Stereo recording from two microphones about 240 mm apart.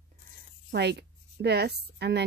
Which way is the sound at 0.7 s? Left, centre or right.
Right.